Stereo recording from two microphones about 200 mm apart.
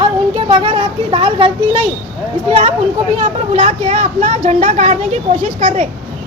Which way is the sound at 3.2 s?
35° right (ahead or behind).